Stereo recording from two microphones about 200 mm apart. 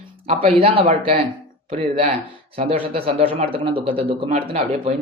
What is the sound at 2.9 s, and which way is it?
Speech, 30° right (ahead or behind).